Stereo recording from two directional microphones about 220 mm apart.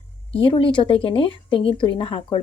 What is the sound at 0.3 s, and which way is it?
A woman's voice, 20° left (ahead or behind).